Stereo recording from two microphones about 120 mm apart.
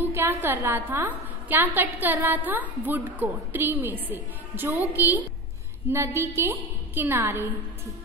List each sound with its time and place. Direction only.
0.0 s a woman's voice: 20° right (ahead or behind)